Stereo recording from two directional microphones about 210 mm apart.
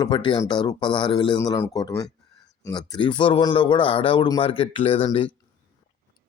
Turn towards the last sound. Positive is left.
turn(degrees=25)  # may be behind; listen again after turning